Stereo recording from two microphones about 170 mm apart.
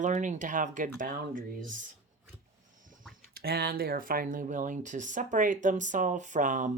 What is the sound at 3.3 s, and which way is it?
Speech, 65° right (ahead or behind).